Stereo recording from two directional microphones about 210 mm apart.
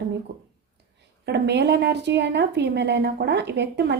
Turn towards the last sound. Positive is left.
turn(degrees=-55)  # may be behind; listen again after turning